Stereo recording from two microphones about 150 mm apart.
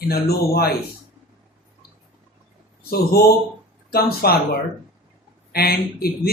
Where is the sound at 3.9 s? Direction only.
90° left.